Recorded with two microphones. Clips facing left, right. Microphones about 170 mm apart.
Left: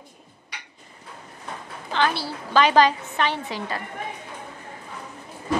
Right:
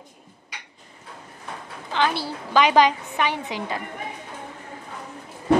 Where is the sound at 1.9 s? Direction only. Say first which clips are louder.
Even; 15° right (ahead or behind).